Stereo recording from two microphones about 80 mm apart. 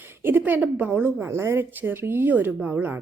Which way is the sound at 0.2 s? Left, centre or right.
Right.